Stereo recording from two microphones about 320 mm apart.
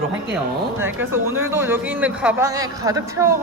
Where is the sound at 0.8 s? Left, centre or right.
Centre.